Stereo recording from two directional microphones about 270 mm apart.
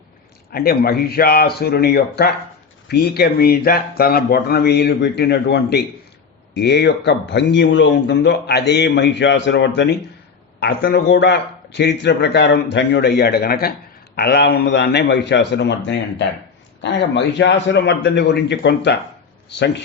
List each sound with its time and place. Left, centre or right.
0.5 s speech: left